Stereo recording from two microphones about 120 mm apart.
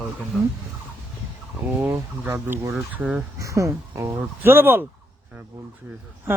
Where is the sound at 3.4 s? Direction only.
25° right (ahead or behind).